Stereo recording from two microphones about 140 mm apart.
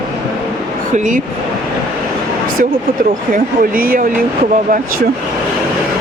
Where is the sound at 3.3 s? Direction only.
90° right.